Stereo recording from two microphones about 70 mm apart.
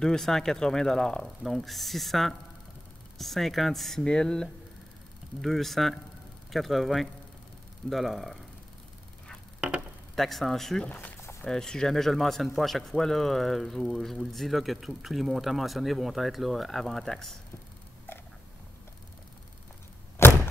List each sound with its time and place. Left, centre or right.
0.0 s a man's voice: centre
9.6 s speech: centre
10.1 s a man's voice: centre
10.9 s speech: left
11.4 s a man's voice: centre
20.2 s a sound: left